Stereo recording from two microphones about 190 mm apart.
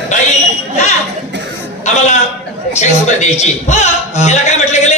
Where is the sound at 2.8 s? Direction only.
35° left (ahead or behind).